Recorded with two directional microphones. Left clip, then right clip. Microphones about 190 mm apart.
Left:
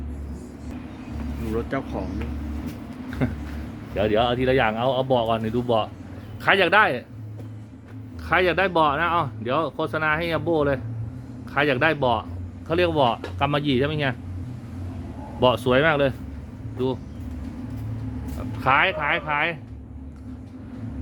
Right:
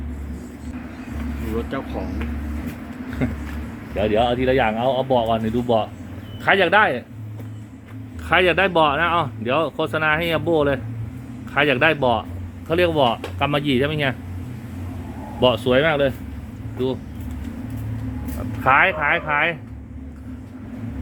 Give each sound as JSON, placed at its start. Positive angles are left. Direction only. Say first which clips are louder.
{"t": 1.5, "sound": "speech", "louder": "even", "side_deg": 35}
{"t": 3.2, "sound": "speech", "louder": "right 2 dB", "side_deg": 5}
{"t": 8.3, "sound": "speech", "louder": "right 3 dB", "side_deg": -5}
{"t": 15.4, "sound": "speech", "louder": "right 2 dB", "side_deg": 0}
{"t": 18.6, "sound": "speech", "louder": "right 4 dB", "side_deg": -10}